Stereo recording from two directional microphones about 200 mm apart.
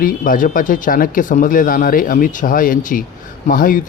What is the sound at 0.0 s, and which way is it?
Speech, 40° left (ahead or behind).